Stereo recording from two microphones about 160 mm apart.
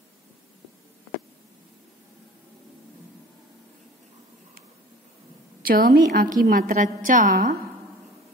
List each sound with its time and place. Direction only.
5.6 s a woman's voice: 65° right (ahead or behind)